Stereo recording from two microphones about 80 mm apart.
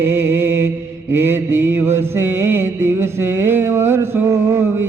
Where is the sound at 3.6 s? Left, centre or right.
Right.